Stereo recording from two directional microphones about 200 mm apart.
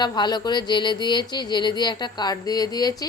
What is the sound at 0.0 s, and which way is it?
Speech, 20° left (ahead or behind).